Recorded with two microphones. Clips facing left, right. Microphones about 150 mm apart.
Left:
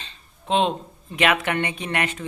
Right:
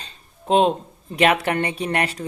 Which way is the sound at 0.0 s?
40° right (ahead or behind).